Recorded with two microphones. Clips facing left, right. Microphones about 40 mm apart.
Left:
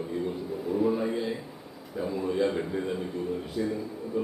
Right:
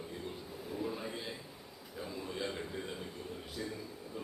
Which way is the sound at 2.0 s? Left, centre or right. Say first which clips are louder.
Left 13 dB; left.